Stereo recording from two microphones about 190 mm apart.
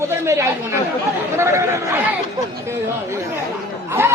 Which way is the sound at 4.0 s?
10° right (ahead or behind).